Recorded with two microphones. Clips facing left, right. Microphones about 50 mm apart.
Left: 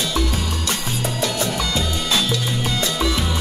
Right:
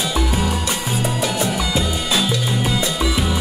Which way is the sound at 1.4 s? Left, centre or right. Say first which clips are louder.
Right 2 dB; centre.